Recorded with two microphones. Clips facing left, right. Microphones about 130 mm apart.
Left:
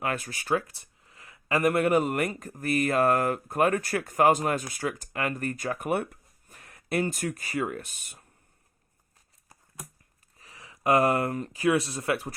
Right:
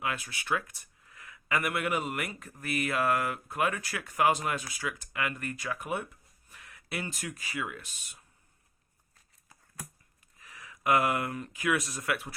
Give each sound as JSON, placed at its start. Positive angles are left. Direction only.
{"t": 0.0, "sound": "speech", "side_deg": 45}
{"t": 6.5, "sound": "speech", "side_deg": 40}
{"t": 10.3, "sound": "speech", "side_deg": 30}